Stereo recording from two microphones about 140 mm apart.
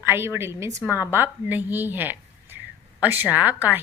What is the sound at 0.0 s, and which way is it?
A woman's voice, 15° right (ahead or behind).